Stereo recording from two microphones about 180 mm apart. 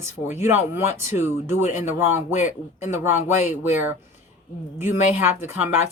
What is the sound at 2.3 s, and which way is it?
Speech, 40° left (ahead or behind).